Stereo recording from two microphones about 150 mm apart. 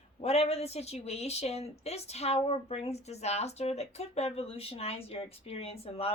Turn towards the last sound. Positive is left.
turn(degrees=40)  # may be behind; listen again after turning